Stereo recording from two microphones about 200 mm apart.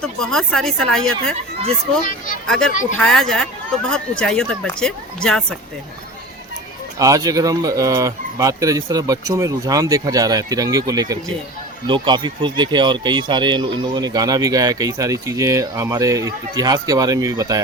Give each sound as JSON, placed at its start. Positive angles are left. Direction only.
{"t": 0.0, "sound": "speech", "side_deg": 5}
{"t": 2.5, "sound": "speech", "side_deg": 5}
{"t": 7.0, "sound": "speech", "side_deg": -15}